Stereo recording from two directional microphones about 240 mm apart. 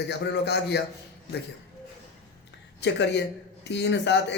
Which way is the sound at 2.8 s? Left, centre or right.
Left.